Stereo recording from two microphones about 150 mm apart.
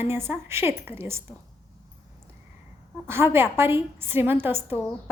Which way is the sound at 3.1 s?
15° right (ahead or behind).